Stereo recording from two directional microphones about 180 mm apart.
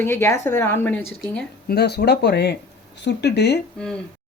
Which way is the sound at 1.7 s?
65° left (ahead or behind).